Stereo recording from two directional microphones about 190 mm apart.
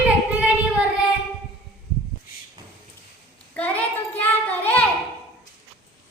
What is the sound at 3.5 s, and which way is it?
Child singing, 10° left (ahead or behind).